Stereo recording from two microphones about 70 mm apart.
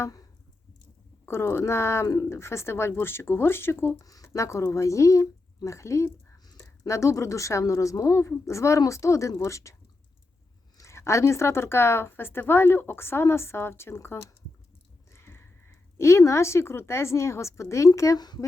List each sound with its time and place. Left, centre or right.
1.2 s speech: left
3.9 s speech: left
4.3 s a woman's voice: left
10.8 s speech: left
15.1 s a sound: left
16.0 s a woman's voice: left